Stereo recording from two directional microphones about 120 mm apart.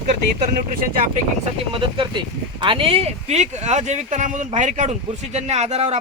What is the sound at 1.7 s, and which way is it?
Speech, 45° right (ahead or behind).